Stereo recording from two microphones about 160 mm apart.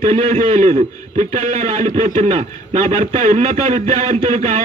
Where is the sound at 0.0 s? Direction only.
45° right (ahead or behind).